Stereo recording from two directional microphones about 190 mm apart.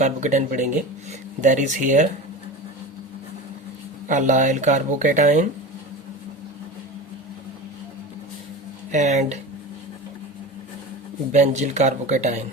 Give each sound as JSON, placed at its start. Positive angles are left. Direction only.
{"t": 0.0, "sound": "speech", "side_deg": -40}
{"t": 4.1, "sound": "speech", "side_deg": -40}
{"t": 8.9, "sound": "speech", "side_deg": -35}
{"t": 11.3, "sound": "speech", "side_deg": -35}